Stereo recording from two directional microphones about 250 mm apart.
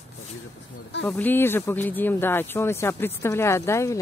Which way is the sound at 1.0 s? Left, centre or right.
Centre.